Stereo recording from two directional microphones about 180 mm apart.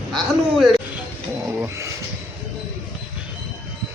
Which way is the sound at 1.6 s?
15° right (ahead or behind).